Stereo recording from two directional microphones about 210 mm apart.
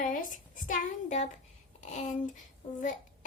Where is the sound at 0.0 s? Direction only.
40° left (ahead or behind).